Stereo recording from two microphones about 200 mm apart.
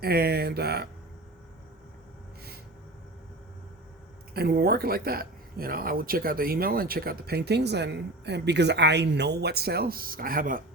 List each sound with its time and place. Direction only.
0.0 s speech: 50° right (ahead or behind)
4.4 s speech: 50° right (ahead or behind)